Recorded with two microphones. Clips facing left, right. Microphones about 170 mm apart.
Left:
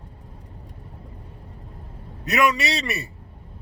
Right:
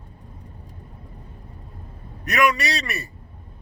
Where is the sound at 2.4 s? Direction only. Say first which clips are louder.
Right 1 dB; 25° left (ahead or behind).